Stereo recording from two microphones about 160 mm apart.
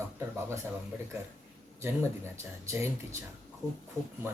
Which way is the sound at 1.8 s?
15° right (ahead or behind).